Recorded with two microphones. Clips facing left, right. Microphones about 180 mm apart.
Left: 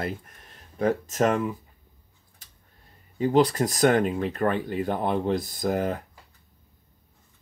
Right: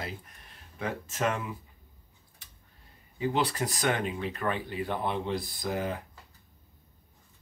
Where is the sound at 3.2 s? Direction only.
40° left (ahead or behind).